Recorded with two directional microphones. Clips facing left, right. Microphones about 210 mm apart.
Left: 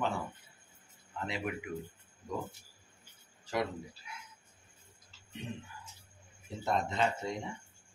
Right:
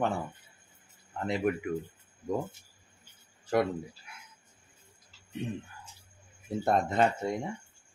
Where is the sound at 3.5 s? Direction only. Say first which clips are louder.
Right 7 dB; 55° right (ahead or behind).